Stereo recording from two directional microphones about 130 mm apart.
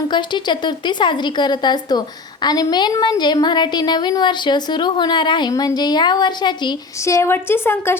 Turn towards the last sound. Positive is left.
turn(degrees=15)  # may be behind; listen again after turning